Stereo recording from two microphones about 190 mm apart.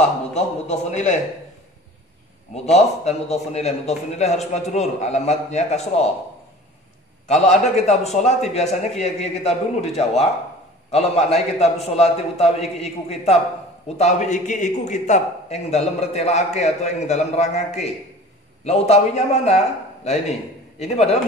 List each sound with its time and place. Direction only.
0.3 s a man's voice: 35° left (ahead or behind)
2.5 s a man's voice: 35° left (ahead or behind)
7.6 s a man's voice: 35° left (ahead or behind)